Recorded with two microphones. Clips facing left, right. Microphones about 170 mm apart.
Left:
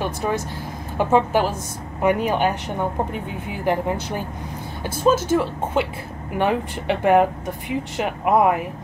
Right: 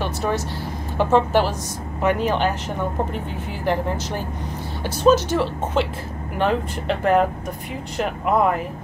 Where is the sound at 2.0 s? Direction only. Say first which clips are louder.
Left 1 dB; 10° left (ahead or behind).